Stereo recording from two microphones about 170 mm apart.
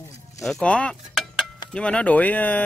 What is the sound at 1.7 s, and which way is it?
Speech, 5° left (ahead or behind).